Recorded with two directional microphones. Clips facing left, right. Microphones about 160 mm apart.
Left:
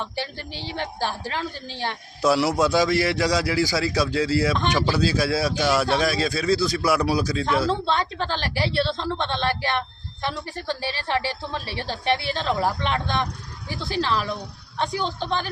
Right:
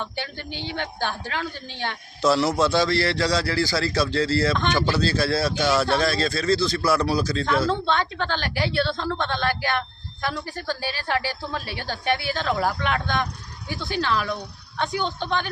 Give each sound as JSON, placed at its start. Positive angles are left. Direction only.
{"t": 0.2, "sound": "a woman's voice", "side_deg": 35}
{"t": 2.2, "sound": "a man's voice", "side_deg": 10}
{"t": 7.7, "sound": "a woman's voice", "side_deg": 35}